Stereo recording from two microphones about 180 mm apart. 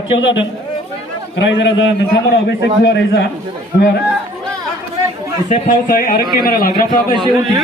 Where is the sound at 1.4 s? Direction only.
85° left.